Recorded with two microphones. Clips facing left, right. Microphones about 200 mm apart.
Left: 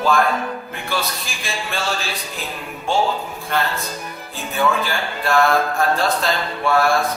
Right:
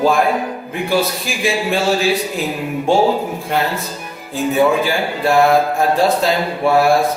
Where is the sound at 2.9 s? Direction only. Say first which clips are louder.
Right 6 dB; 40° right (ahead or behind).